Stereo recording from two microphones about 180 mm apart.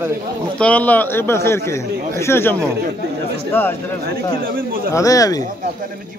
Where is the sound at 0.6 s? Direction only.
5° left (ahead or behind).